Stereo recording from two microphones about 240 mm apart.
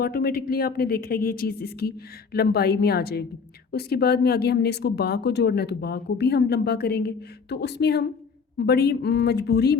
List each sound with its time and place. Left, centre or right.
0.0 s a woman's voice: left